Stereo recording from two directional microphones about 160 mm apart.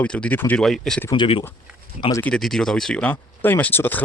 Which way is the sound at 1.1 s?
30° left (ahead or behind).